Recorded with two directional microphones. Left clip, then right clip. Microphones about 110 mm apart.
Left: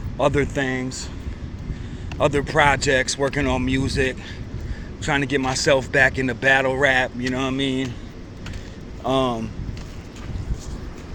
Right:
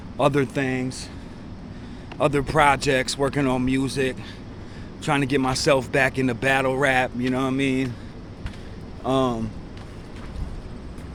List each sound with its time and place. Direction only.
0.2 s speech: 50° right (ahead or behind)
0.4 s speech: 35° right (ahead or behind)
2.1 s speech: 35° right (ahead or behind)
3.5 s speech: 35° right (ahead or behind)
5.0 s speech: 45° right (ahead or behind)
6.8 s speech: 45° right (ahead or behind)
7.4 s speech: 30° right (ahead or behind)
9.0 s speech: 35° right (ahead or behind)